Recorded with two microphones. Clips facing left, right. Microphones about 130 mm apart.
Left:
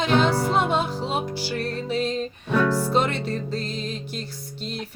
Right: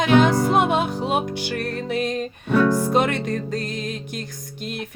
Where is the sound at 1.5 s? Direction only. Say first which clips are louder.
Right 1 dB; 60° right (ahead or behind).